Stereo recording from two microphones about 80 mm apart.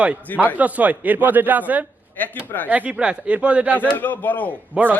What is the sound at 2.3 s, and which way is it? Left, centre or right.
Speech, left.